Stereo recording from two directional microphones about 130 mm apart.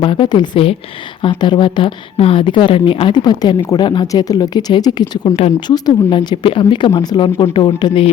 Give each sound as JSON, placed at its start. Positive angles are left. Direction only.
{"t": 0.0, "sound": "a woman's voice", "side_deg": 40}